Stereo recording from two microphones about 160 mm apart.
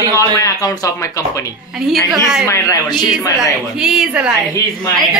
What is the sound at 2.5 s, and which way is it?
Speech, 25° left (ahead or behind).